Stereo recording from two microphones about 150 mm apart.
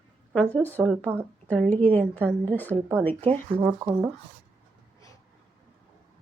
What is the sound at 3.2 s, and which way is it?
Speech, 40° right (ahead or behind).